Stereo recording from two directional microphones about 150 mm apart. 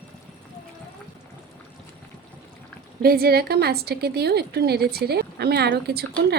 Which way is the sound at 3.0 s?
90° right.